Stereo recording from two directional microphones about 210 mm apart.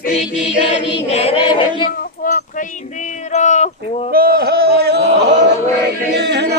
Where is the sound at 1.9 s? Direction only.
40° left (ahead or behind).